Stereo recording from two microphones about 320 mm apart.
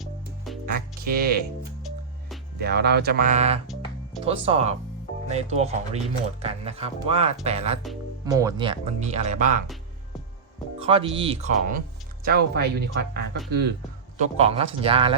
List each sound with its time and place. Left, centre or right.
0.0 s music: centre
0.6 s music: right
2.6 s speech: right
10.8 s speech: centre
12.2 s speech: right
14.2 s speech: centre